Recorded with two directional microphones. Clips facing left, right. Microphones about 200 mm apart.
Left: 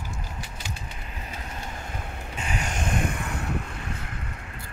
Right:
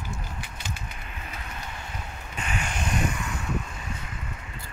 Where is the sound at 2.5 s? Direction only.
40° left (ahead or behind).